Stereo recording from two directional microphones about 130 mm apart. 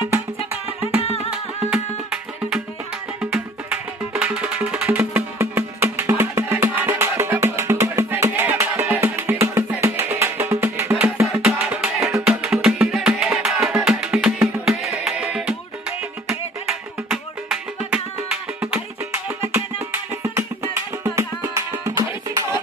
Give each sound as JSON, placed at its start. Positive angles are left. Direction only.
{"t": 1.0, "sound": "music", "side_deg": 50}
{"t": 3.2, "sound": "music", "side_deg": -10}
{"t": 11.4, "sound": "music", "side_deg": -10}